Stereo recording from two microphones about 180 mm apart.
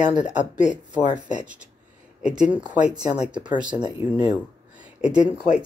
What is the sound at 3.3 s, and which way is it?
Speech, 25° right (ahead or behind).